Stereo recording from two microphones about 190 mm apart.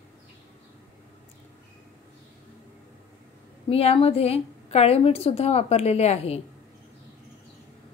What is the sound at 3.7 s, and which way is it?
A woman's voice, 30° left (ahead or behind).